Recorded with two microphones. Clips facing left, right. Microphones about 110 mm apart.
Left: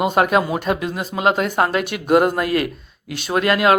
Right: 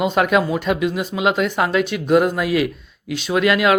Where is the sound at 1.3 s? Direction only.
45° left (ahead or behind).